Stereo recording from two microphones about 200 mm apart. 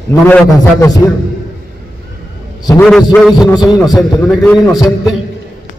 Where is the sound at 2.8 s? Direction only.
Centre (ahead or behind).